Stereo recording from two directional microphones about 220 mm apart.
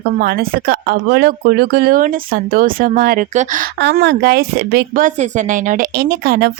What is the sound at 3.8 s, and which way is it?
Speech, 50° right (ahead or behind).